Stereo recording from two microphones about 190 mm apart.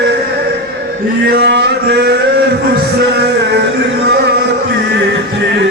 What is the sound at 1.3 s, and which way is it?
Music, 60° right (ahead or behind).